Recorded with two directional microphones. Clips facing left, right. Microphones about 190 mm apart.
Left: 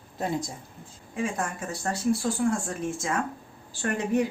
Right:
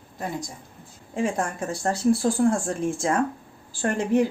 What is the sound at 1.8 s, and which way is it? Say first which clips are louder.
Speech: right 5 dB; 35° right (ahead or behind).